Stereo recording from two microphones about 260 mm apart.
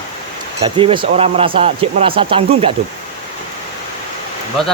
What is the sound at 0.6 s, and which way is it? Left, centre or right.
Speech, centre.